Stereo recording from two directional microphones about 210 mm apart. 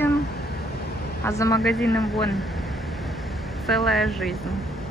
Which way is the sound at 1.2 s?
15° left (ahead or behind).